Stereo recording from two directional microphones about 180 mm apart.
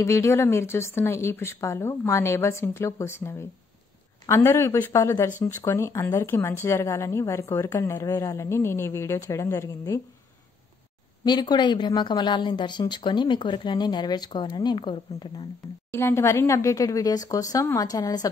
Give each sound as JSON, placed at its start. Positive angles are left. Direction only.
{"t": 0.0, "sound": "speech", "side_deg": 15}
{"t": 11.2, "sound": "a woman's voice", "side_deg": 25}
{"t": 15.9, "sound": "a woman's voice", "side_deg": 15}